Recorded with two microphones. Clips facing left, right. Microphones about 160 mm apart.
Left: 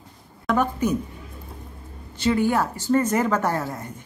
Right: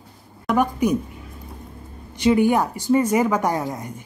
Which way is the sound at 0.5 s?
10° right (ahead or behind).